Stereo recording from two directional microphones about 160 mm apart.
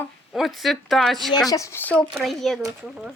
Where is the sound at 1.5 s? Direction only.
20° left (ahead or behind); by 3.1 s centre (ahead or behind).